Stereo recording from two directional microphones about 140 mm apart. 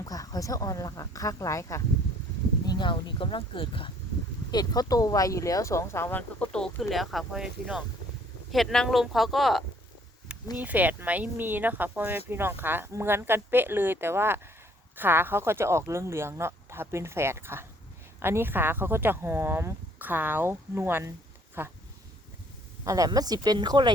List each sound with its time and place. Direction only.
0.0 s speech: 25° left (ahead or behind)
2.6 s speech: 35° left (ahead or behind); by 9.6 s centre (ahead or behind)
10.6 s speech: 10° right (ahead or behind)
22.8 s speech: 25° right (ahead or behind)